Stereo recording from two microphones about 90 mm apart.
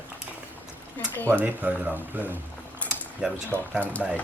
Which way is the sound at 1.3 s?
20° right (ahead or behind).